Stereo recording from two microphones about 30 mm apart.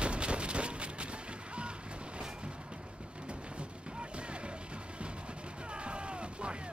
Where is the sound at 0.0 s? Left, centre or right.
Right.